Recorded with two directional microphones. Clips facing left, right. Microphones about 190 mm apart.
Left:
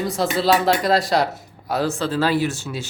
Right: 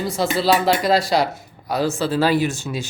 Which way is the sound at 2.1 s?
15° right (ahead or behind).